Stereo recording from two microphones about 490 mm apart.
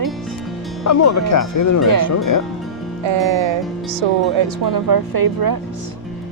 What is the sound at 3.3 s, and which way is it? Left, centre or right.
Speech, right.